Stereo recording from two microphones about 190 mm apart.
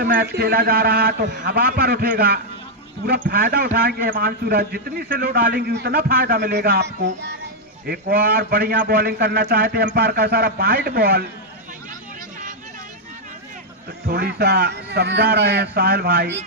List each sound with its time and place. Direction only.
0.0 s a man's voice: 55° right (ahead or behind)
14.1 s a man's voice: 55° right (ahead or behind)